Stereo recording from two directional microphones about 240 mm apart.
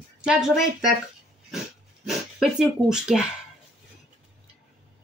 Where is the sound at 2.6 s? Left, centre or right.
Centre.